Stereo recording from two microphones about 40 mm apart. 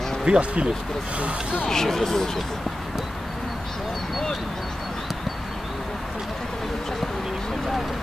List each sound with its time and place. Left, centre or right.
0.2 s speech: right
1.7 s speech: centre